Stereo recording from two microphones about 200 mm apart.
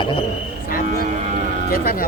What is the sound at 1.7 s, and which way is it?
Speech, 45° left (ahead or behind).